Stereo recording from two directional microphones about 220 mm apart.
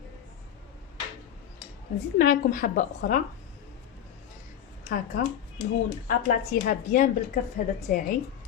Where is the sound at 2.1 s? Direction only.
40° left (ahead or behind).